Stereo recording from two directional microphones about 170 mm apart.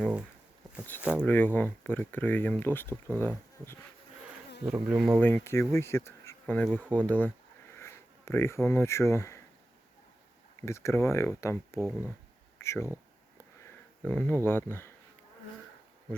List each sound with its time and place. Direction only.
0.0 s speech: 5° right (ahead or behind)
1.2 s speech: 10° left (ahead or behind)
4.6 s speech: 5° right (ahead or behind); by 9.4 s 15° left (ahead or behind)
10.7 s speech: 15° left (ahead or behind)
14.0 s speech: 10° left (ahead or behind)